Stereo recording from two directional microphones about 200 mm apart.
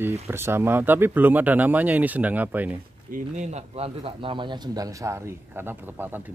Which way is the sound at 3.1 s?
35° right (ahead or behind).